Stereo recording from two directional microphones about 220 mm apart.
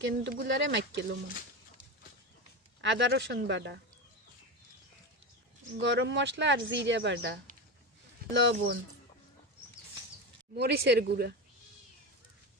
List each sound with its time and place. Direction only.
0.0 s a woman's voice: 55° right (ahead or behind)
2.8 s speech: 55° right (ahead or behind)
5.8 s a woman's voice: 55° right (ahead or behind)
10.5 s speech: 50° right (ahead or behind)